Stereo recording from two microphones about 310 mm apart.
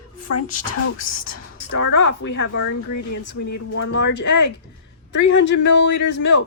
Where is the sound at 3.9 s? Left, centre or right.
Left.